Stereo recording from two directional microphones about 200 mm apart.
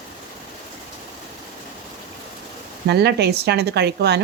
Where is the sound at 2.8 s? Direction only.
55° right (ahead or behind).